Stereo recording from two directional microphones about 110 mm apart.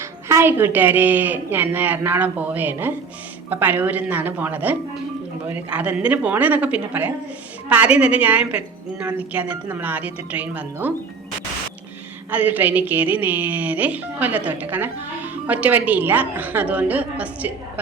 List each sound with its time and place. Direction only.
0.0 s a woman's voice: 25° right (ahead or behind)
12.3 s a woman's voice: 15° right (ahead or behind)